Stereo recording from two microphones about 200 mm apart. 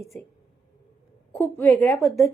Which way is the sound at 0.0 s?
15° left (ahead or behind).